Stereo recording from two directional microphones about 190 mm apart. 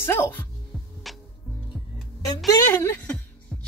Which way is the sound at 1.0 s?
Centre (ahead or behind).